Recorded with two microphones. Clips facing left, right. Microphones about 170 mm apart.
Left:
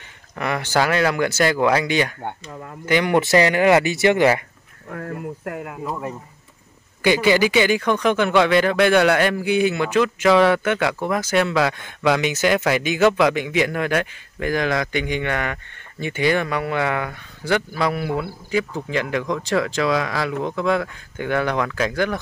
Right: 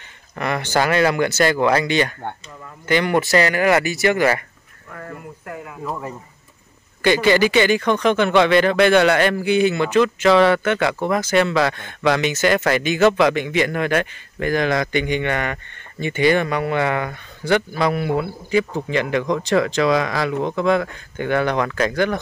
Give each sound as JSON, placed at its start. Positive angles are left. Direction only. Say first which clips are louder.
{"t": 0.4, "sound": "speech", "louder": "right 1 dB", "side_deg": 5}
{"t": 4.9, "sound": "speech", "louder": "left 5 dB", "side_deg": 60}
{"t": 7.0, "sound": "speech", "louder": "right 1 dB", "side_deg": 10}